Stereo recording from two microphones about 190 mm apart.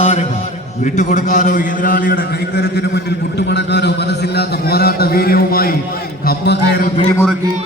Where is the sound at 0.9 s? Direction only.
40° left (ahead or behind); by 6.9 s 60° left (ahead or behind).